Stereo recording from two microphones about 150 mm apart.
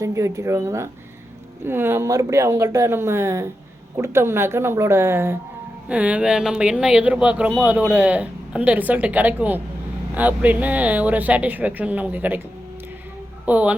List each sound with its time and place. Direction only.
0.0 s speech: 20° right (ahead or behind)
13.4 s speech: 10° right (ahead or behind)